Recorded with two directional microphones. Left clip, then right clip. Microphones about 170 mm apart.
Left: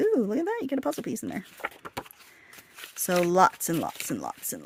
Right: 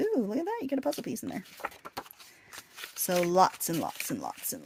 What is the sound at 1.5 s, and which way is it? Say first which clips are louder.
Keys jangling: left 3 dB; 15° left (ahead or behind).